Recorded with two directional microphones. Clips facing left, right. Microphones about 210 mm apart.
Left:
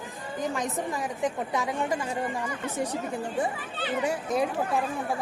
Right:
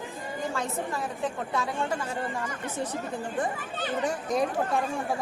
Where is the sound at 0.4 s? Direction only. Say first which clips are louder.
Left 2 dB; 15° left (ahead or behind).